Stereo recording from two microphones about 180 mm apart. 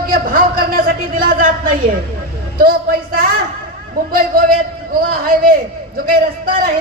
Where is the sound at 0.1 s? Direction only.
50° right (ahead or behind).